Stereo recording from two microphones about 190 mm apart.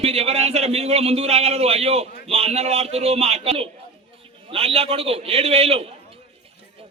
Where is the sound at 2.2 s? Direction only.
30° right (ahead or behind).